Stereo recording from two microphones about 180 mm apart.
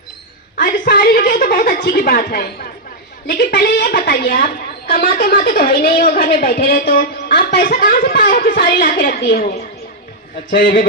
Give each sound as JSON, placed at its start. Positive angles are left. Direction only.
{"t": 0.5, "sound": "a woman's voice", "side_deg": 55}
{"t": 10.5, "sound": "a woman's voice", "side_deg": 50}